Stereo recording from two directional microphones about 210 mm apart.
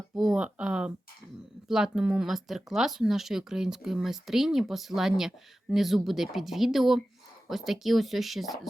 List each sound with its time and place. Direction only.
0.2 s speech: 5° right (ahead or behind)